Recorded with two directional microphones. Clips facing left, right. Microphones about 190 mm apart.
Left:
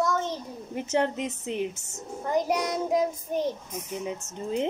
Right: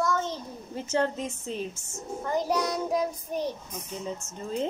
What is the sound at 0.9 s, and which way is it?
A child's voice, 20° left (ahead or behind).